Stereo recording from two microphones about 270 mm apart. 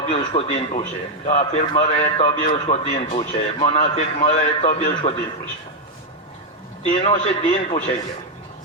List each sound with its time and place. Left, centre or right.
0.0 s a man's voice: left
6.9 s a man's voice: left